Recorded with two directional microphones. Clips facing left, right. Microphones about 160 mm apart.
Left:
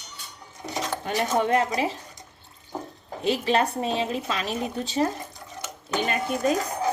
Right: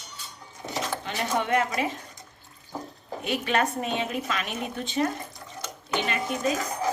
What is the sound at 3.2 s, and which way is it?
A woman's voice, 30° left (ahead or behind).